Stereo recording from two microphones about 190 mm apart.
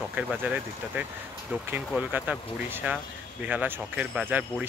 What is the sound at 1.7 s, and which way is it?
Speech, 10° right (ahead or behind).